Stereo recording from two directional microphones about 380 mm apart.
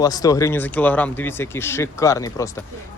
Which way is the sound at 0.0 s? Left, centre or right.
Centre.